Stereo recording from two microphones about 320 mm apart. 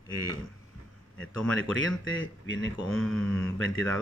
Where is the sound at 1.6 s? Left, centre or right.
Left.